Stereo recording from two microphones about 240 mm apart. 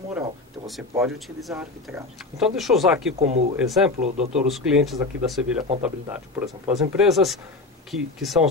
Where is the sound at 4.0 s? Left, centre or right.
Right.